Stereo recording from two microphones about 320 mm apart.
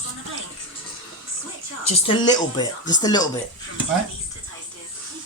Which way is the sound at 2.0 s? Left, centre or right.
Centre.